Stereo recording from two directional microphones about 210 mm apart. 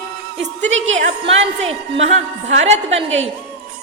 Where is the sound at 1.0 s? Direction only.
35° right (ahead or behind).